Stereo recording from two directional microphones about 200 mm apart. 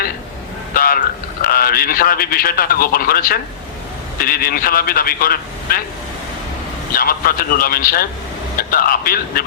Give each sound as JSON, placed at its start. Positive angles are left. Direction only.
{"t": 0.7, "sound": "a sound", "side_deg": 45}
{"t": 1.5, "sound": "a man's voice", "side_deg": 45}
{"t": 6.9, "sound": "a man's voice", "side_deg": 45}